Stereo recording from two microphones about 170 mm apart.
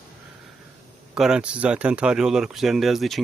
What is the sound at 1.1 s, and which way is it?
Speech, 5° right (ahead or behind).